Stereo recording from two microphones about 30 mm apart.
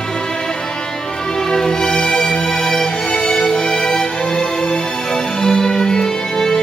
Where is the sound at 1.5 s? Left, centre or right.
Left.